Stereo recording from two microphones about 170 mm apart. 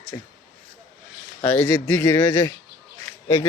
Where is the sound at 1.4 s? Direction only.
10° left (ahead or behind).